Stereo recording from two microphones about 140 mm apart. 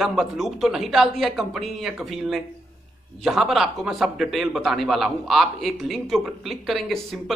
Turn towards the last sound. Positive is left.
turn(degrees=0)  # may be behind; listen again after turning